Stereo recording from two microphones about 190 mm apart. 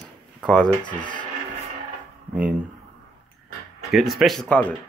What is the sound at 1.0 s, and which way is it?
Speech, 25° left (ahead or behind).